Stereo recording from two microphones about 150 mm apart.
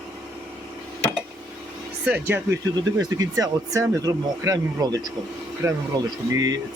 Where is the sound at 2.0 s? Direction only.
10° right (ahead or behind).